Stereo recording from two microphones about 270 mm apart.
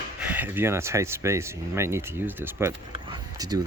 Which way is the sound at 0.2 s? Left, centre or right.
Centre.